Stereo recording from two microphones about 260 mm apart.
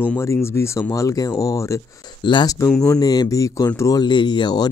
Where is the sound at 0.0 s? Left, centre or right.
Centre.